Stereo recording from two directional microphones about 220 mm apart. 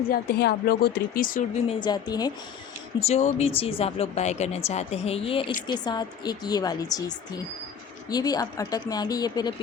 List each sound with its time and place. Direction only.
0.1 s speech: 50° left (ahead or behind)
1.8 s speech: 20° left (ahead or behind)
3.0 s speech: 30° left (ahead or behind)